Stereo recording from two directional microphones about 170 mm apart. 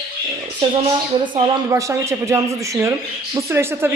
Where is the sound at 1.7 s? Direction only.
15° right (ahead or behind).